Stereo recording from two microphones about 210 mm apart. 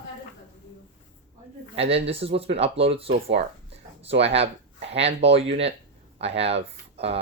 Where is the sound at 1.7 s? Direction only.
30° right (ahead or behind).